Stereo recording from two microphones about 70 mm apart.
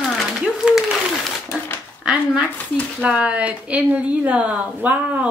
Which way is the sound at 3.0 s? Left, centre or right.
Centre.